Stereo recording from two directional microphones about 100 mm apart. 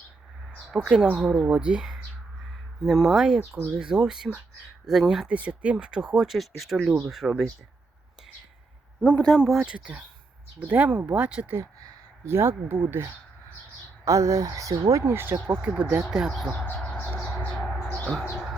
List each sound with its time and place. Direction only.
0.9 s speech: 10° right (ahead or behind)
9.0 s speech: 10° left (ahead or behind); by 11.5 s 15° right (ahead or behind)
11.5 s a sound: 35° right (ahead or behind)
12.3 s speech: 25° right (ahead or behind)
14.0 s speech: 30° right (ahead or behind)
15.0 s speech: 25° right (ahead or behind)
16.0 s speech: 5° right (ahead or behind)
16.6 s bird: 15° left (ahead or behind)
17.2 s a sound: 10° left (ahead or behind)
17.9 s bird: 10° left (ahead or behind)